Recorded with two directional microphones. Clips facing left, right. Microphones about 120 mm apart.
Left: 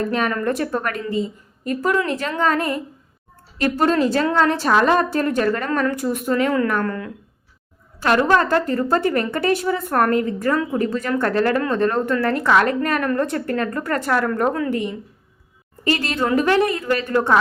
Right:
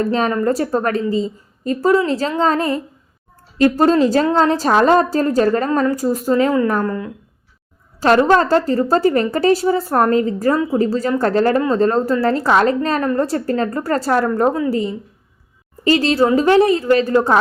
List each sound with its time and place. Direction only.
0.1 s a woman's voice: 30° right (ahead or behind)
6.8 s a woman's voice: 20° right (ahead or behind)
8.2 s a woman's voice: 30° right (ahead or behind)